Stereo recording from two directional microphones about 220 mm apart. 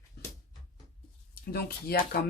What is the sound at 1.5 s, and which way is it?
Speech, 45° left (ahead or behind).